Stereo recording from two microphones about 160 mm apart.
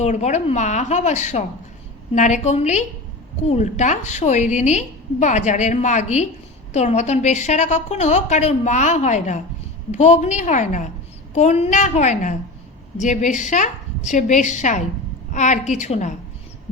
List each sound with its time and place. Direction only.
0.0 s a woman's voice: 45° left (ahead or behind)